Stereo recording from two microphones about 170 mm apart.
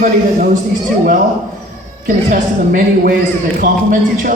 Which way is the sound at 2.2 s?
50° right (ahead or behind).